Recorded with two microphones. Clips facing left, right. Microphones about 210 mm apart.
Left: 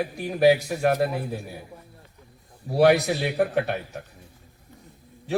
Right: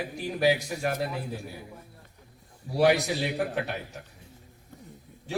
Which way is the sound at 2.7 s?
60° left (ahead or behind).